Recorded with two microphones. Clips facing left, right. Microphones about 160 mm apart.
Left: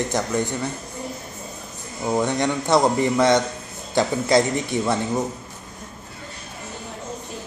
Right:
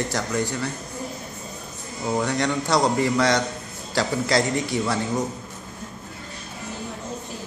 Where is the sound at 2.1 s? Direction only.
20° left (ahead or behind).